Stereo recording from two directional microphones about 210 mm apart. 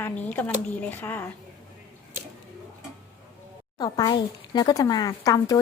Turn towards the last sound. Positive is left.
turn(degrees=15)  # may be behind; listen again after turning